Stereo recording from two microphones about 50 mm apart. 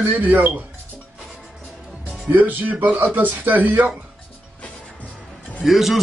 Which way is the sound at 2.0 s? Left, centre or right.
Right.